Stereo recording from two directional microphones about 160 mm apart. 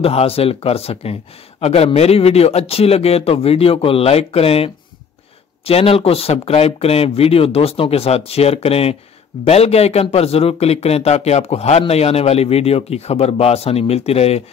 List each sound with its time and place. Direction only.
0.0 s a man's voice: 35° left (ahead or behind)